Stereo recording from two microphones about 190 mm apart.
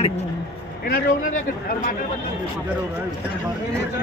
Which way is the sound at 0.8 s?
45° left (ahead or behind).